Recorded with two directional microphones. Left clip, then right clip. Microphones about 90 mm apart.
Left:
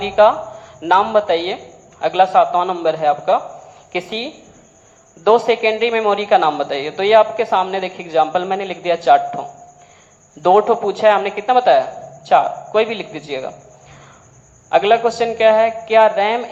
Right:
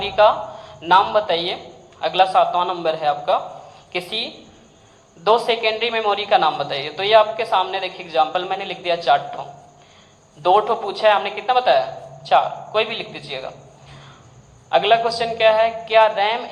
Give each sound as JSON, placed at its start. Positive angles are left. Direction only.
{"t": 0.0, "sound": "a man's voice", "side_deg": 30}
{"t": 14.7, "sound": "a man's voice", "side_deg": 30}